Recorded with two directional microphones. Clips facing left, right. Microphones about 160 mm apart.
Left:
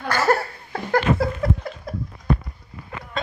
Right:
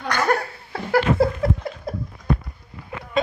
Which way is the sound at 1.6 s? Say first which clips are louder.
Right 2 dB; 25° right (ahead or behind).